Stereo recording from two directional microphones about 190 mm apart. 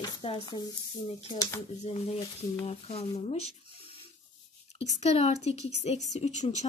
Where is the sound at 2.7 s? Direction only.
35° left (ahead or behind).